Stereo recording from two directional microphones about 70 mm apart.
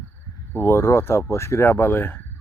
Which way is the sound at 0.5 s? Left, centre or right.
Left.